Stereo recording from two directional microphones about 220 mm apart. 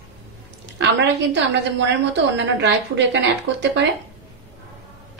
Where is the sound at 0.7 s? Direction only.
55° right (ahead or behind).